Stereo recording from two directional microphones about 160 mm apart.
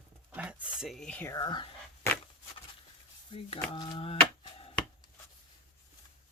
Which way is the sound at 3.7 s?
30° left (ahead or behind).